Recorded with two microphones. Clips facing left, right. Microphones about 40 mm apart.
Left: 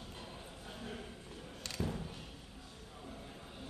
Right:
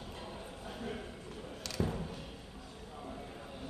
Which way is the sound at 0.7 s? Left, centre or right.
Centre.